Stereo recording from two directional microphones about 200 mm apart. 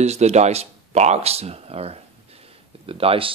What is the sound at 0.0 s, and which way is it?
Speech, 35° right (ahead or behind).